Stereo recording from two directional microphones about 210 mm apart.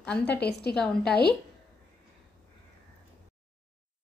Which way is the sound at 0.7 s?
5° left (ahead or behind).